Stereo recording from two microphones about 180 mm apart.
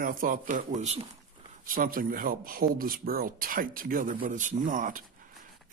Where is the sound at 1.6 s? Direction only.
50° right (ahead or behind).